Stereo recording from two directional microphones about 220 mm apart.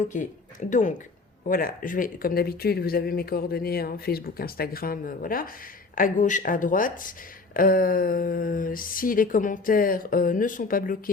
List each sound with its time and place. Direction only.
0.0 s speech: 35° left (ahead or behind)